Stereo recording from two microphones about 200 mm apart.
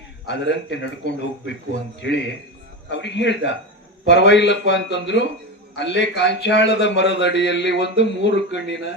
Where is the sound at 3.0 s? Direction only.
60° left (ahead or behind).